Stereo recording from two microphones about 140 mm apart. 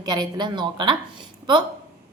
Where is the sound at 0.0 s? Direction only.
30° right (ahead or behind).